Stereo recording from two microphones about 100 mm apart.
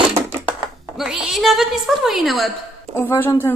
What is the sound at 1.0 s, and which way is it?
A woman's voice, 5° right (ahead or behind).